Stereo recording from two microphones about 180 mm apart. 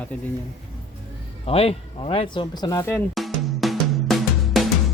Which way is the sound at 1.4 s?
35° left (ahead or behind).